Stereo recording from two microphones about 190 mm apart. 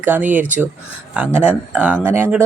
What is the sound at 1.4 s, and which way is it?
Speech, 5° right (ahead or behind).